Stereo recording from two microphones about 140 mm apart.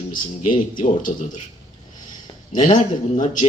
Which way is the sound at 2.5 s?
65° left (ahead or behind).